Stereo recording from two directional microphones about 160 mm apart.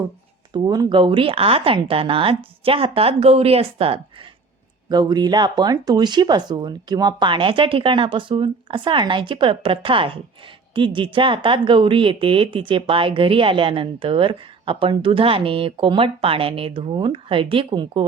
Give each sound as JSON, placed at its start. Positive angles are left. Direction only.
{"t": 0.5, "sound": "a woman's voice", "side_deg": -25}
{"t": 4.9, "sound": "a woman's voice", "side_deg": -25}